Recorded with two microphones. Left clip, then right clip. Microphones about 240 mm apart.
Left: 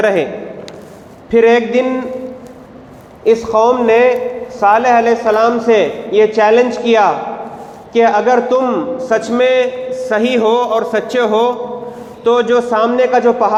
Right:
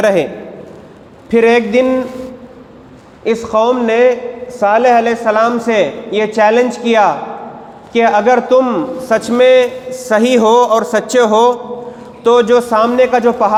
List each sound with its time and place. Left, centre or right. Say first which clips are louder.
0.0 s a man's voice: right 1 dB; right
1.3 s a man's voice: even; right
3.2 s a man's voice: left 2 dB; right